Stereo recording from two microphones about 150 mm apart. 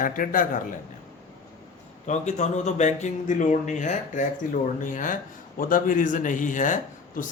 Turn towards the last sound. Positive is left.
turn(degrees=60)  # may be behind; listen again after turning